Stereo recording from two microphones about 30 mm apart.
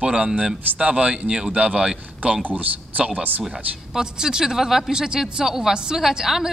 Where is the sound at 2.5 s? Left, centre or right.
Right.